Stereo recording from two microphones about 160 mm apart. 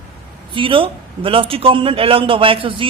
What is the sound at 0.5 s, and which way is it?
A man's voice, 35° right (ahead or behind).